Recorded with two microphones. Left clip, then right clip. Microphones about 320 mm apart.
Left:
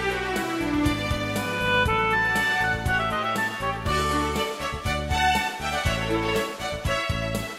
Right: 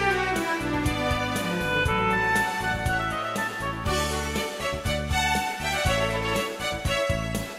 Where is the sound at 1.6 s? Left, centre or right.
Centre.